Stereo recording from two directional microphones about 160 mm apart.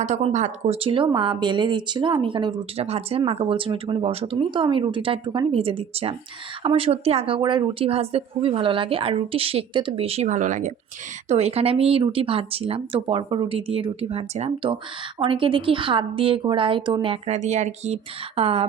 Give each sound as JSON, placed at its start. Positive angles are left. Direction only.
{"t": 0.0, "sound": "speech", "side_deg": -45}